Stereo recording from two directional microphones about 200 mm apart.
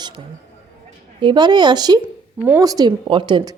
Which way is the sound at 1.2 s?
20° right (ahead or behind).